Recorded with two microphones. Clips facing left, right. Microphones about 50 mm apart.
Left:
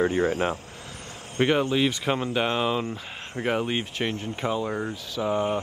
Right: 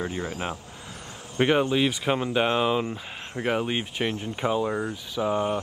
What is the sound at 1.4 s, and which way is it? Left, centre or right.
Speech, centre.